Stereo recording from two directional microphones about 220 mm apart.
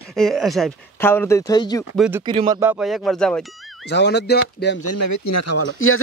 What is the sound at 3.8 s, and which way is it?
Speech, 50° left (ahead or behind).